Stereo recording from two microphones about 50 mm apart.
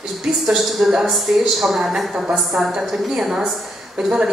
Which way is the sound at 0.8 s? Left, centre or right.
Centre.